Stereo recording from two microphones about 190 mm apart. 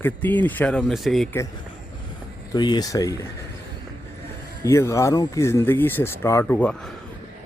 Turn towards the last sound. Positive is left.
turn(degrees=5)  # may be behind; listen again after turning